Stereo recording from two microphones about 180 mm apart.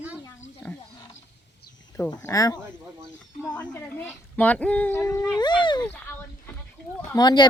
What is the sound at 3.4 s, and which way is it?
A woman's voice, 5° left (ahead or behind).